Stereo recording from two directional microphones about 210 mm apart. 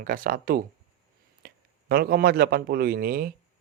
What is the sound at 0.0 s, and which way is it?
A man's voice, 40° right (ahead or behind).